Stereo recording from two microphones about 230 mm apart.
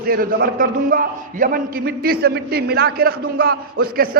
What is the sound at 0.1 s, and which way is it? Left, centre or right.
A man's voice, right.